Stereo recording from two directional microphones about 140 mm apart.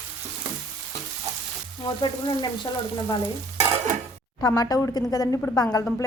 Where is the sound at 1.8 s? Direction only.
35° left (ahead or behind).